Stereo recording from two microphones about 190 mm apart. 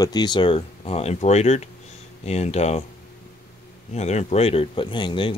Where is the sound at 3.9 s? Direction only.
35° left (ahead or behind).